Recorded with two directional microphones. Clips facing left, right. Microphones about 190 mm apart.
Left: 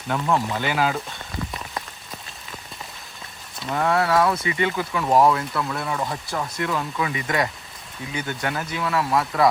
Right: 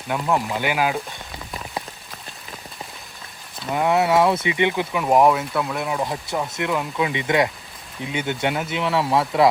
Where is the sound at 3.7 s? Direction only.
15° right (ahead or behind).